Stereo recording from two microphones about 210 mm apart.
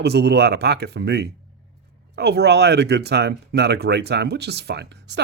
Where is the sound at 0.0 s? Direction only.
50° right (ahead or behind).